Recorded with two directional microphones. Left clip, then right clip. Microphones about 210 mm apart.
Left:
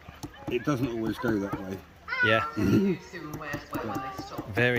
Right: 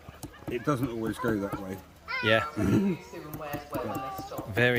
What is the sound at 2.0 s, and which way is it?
Speech, 15° right (ahead or behind).